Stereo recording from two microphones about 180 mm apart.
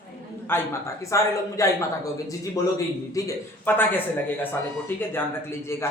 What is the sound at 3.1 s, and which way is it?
Speech, 15° left (ahead or behind).